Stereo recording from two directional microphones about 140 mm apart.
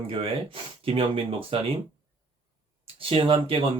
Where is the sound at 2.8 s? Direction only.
40° right (ahead or behind).